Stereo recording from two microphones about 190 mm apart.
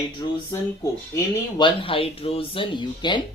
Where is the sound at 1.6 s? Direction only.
30° left (ahead or behind).